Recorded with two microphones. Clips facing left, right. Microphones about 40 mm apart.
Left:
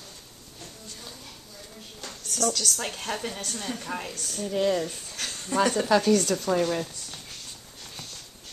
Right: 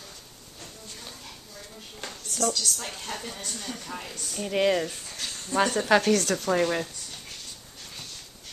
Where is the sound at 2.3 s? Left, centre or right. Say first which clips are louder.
Even; left.